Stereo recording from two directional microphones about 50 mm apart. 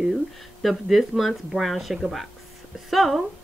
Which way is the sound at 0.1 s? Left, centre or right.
Centre.